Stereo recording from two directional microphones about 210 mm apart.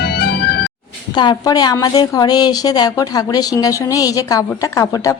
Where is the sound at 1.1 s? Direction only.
20° left (ahead or behind).